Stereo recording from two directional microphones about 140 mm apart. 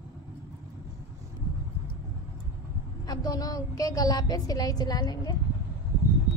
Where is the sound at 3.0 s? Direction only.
30° left (ahead or behind).